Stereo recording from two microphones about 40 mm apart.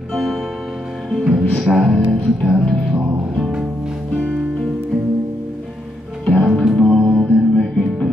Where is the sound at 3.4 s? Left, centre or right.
Centre.